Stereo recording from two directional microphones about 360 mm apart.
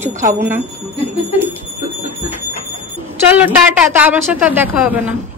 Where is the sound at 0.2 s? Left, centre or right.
Right.